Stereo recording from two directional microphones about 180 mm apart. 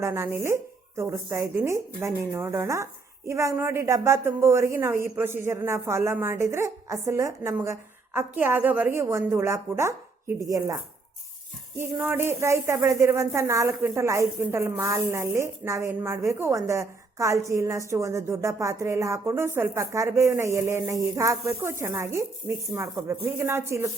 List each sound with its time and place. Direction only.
0.0 s speech: 15° right (ahead or behind)
11.8 s speech: 10° right (ahead or behind)